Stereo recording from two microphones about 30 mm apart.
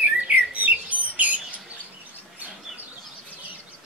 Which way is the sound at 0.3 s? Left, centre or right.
Right.